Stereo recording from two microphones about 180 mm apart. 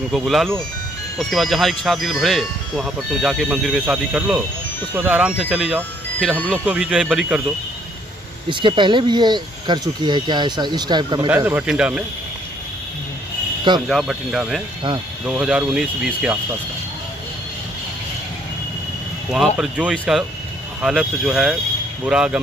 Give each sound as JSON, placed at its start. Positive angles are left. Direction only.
{"t": 0.1, "sound": "speech", "side_deg": 0}
{"t": 5.8, "sound": "speech", "side_deg": 10}
{"t": 6.5, "sound": "speech", "side_deg": -5}
{"t": 8.5, "sound": "speech", "side_deg": -25}
{"t": 11.2, "sound": "speech", "side_deg": -10}
{"t": 13.8, "sound": "speech", "side_deg": 0}
{"t": 19.3, "sound": "speech", "side_deg": 0}